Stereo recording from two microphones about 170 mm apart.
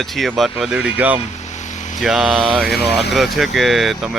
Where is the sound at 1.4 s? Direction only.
45° left (ahead or behind).